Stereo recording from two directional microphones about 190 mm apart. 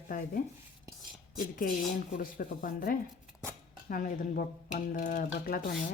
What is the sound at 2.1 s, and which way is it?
Speech, 45° left (ahead or behind).